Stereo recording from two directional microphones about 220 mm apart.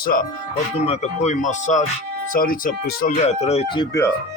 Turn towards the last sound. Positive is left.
turn(degrees=15)  # may be behind; listen again after turning